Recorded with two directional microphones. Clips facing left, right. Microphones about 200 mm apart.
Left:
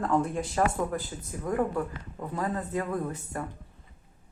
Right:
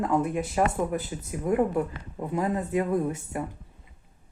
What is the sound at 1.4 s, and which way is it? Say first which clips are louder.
Speech: right 4 dB; 20° right (ahead or behind).